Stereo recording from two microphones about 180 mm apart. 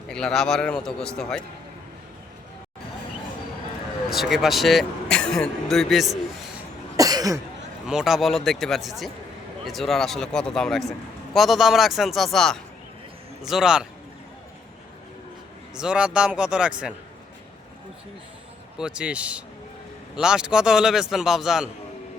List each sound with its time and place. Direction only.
0.1 s a man's voice: 5° left (ahead or behind)
4.1 s a man's voice: centre (ahead or behind)
6.9 s cough: 20° right (ahead or behind)
7.9 s a man's voice: 5° right (ahead or behind)
15.7 s a man's voice: 5° right (ahead or behind)
18.8 s a man's voice: 5° right (ahead or behind)